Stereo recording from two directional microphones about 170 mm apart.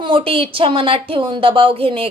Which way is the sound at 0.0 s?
30° right (ahead or behind).